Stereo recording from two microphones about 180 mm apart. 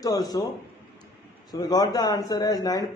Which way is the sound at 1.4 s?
20° left (ahead or behind).